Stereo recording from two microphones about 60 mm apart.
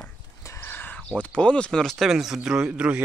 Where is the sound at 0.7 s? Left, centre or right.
Left.